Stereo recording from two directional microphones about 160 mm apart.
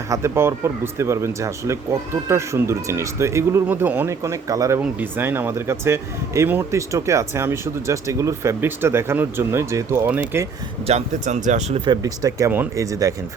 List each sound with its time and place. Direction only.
0.1 s speech: 15° right (ahead or behind)
10.8 s speech: 45° right (ahead or behind)
11.9 s speech: 20° right (ahead or behind)